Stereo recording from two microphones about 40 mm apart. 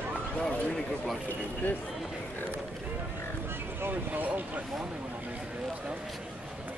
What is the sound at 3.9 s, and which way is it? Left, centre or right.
Speech, right.